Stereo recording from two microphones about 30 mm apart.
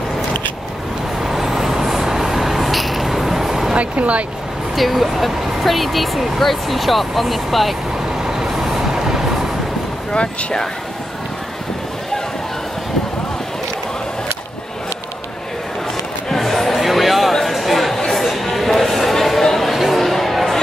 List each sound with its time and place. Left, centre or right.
1.2 s a sound: centre
3.7 s speech: right
4.7 s speech: centre
8.2 s vehicle: centre
10.1 s speech: left
16.3 s chatter: centre
16.7 s a sound: centre
19.7 s chatter: centre